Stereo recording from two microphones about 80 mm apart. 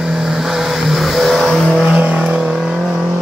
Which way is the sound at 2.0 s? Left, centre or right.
Centre.